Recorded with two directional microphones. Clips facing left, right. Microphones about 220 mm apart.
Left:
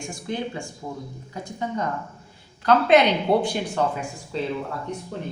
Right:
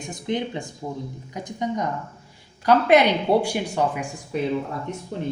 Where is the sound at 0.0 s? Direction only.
20° right (ahead or behind).